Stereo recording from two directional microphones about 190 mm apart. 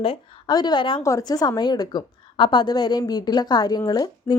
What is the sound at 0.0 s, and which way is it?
Speech, 25° left (ahead or behind).